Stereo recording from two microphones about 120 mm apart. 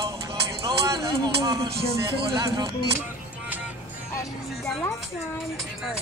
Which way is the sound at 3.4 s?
15° right (ahead or behind).